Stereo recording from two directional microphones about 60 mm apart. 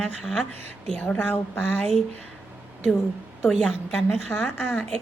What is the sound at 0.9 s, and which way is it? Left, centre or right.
Speech, left.